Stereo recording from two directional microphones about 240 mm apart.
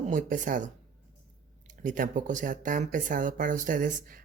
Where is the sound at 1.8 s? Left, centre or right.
Right.